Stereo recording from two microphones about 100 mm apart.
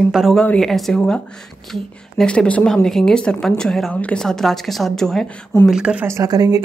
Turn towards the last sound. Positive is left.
turn(degrees=-40)  # may be behind; listen again after turning